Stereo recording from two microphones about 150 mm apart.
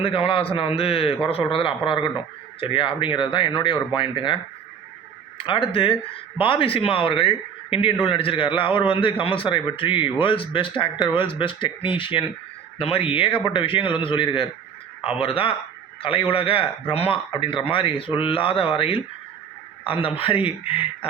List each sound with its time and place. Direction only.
0.0 s a man's voice: 40° left (ahead or behind)
5.4 s a man's voice: 35° left (ahead or behind)